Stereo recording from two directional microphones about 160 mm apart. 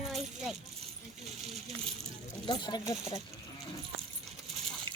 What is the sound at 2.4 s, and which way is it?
Speech, 30° left (ahead or behind).